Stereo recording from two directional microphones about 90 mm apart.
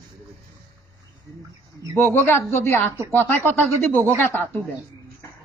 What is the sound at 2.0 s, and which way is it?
A man's voice, 25° left (ahead or behind).